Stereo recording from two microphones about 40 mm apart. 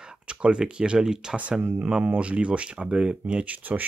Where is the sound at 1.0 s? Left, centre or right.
Centre.